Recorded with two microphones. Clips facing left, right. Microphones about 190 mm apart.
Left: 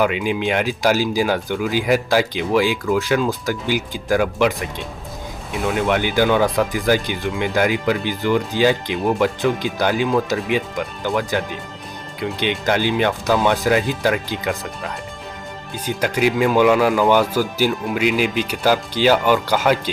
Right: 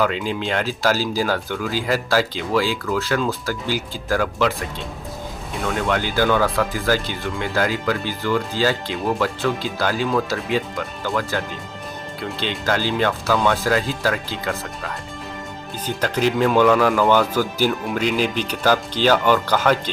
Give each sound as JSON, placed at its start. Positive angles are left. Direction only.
{"t": 0.0, "sound": "speech", "side_deg": 15}
{"t": 5.6, "sound": "speech", "side_deg": 15}
{"t": 15.9, "sound": "speech", "side_deg": 10}